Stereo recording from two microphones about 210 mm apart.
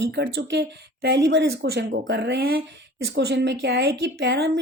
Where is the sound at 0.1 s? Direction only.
55° right (ahead or behind).